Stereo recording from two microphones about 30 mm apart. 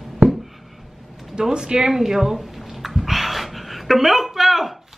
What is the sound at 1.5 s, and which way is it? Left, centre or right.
Speech, right.